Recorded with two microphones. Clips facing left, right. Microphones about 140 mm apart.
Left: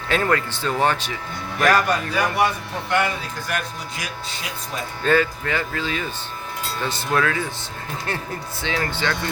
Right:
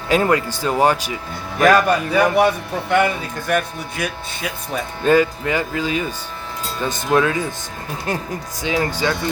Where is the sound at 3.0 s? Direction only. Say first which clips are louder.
Right 5 dB; 55° right (ahead or behind).